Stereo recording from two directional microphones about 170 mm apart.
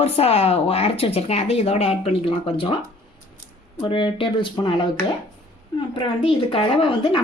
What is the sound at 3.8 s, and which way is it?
Speech, 30° left (ahead or behind).